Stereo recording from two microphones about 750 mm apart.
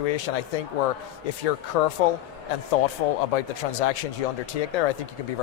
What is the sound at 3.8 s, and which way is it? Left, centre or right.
Speech, left.